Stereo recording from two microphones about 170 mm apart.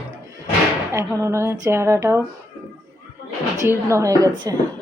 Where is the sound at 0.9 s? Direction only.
15° right (ahead or behind).